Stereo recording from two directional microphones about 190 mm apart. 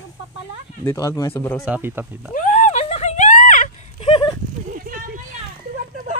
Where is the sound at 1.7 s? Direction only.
10° right (ahead or behind).